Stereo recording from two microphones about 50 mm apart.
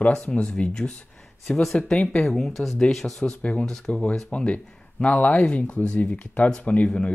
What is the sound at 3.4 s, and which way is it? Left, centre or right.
Speech, left.